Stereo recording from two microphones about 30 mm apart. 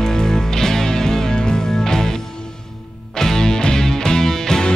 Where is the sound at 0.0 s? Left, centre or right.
Centre.